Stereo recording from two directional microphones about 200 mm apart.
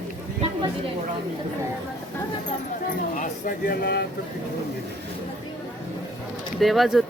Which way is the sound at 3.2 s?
45° left (ahead or behind).